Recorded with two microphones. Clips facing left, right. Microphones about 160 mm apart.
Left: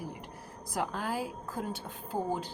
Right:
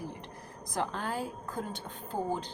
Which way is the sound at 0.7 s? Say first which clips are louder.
Even; 5° left (ahead or behind).